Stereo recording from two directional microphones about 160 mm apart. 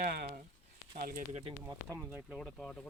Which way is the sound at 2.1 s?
10° right (ahead or behind).